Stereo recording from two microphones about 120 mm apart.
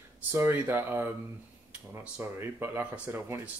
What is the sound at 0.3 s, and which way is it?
Speech, 15° right (ahead or behind).